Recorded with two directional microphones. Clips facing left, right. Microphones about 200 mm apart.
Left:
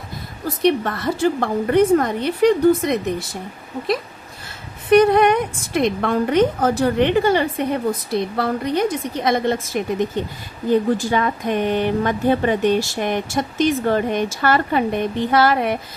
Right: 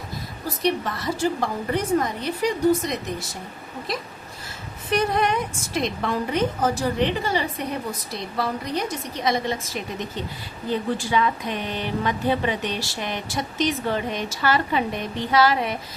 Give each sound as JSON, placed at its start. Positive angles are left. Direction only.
{"t": 0.4, "sound": "a woman's voice", "side_deg": 55}
{"t": 4.9, "sound": "a woman's voice", "side_deg": 60}